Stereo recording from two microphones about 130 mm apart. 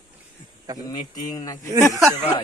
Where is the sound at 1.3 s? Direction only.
25° left (ahead or behind).